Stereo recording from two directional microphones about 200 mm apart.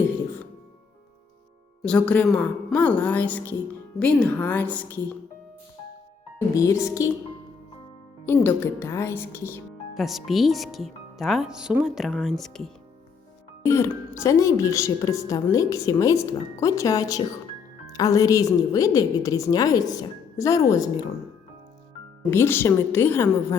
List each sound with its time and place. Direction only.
1.8 s a woman's voice: 5° left (ahead or behind)
6.5 s a woman's voice: 15° left (ahead or behind)
8.3 s a woman's voice: 10° left (ahead or behind)
9.9 s speech: centre (ahead or behind)
13.7 s a woman's voice: 15° left (ahead or behind)
22.3 s a woman's voice: 10° left (ahead or behind)